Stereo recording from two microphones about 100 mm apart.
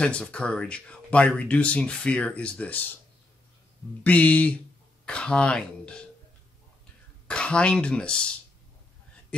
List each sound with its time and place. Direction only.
0.0 s speech: 10° left (ahead or behind)
4.0 s speech: 15° left (ahead or behind)
7.2 s speech: 10° left (ahead or behind)